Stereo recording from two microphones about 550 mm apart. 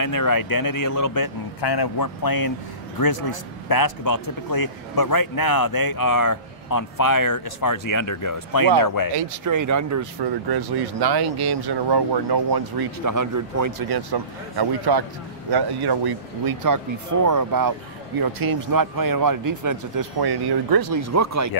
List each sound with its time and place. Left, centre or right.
0.0 s speech: left
9.1 s speech: right
10.5 s speech: right